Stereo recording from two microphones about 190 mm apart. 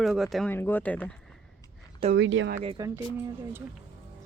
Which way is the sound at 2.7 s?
15° right (ahead or behind).